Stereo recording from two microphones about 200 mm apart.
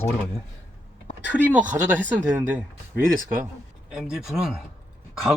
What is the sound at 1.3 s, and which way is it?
Speech, 5° right (ahead or behind).